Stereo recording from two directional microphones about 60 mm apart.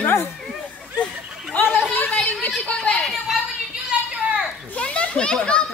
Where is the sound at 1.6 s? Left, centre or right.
Left.